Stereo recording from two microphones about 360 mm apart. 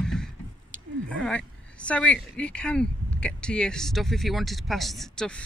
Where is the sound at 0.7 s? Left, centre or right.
Right.